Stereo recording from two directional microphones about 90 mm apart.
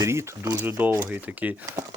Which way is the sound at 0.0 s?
30° right (ahead or behind).